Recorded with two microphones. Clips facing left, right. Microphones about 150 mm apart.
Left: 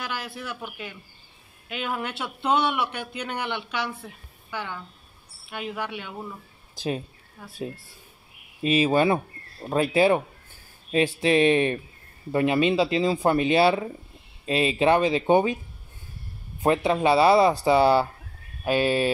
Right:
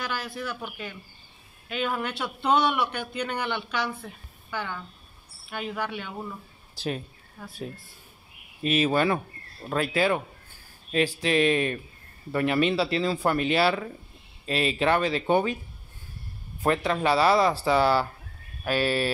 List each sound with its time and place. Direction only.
0.3 s a woman's voice: 5° left (ahead or behind)
5.5 s speech: 5° left (ahead or behind)
7.4 s speech: 5° left (ahead or behind)
8.6 s speech: 10° left (ahead or behind)
16.6 s speech: 15° left (ahead or behind)